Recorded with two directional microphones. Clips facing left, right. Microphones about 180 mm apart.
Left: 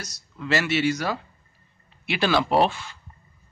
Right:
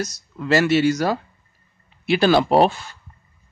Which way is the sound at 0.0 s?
45° right (ahead or behind).